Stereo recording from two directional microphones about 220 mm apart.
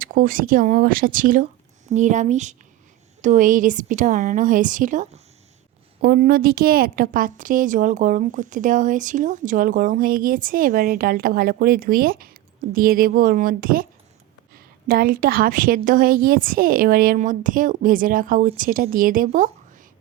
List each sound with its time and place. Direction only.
0.0 s a woman's voice: 40° right (ahead or behind)